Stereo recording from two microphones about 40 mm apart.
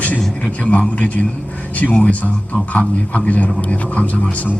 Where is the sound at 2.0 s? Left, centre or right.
Left.